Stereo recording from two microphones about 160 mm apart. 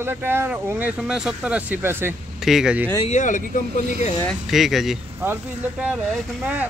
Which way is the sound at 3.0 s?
50° left (ahead or behind).